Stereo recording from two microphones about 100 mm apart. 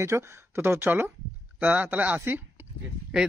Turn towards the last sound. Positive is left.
turn(degrees=-10)  # may be behind; listen again after turning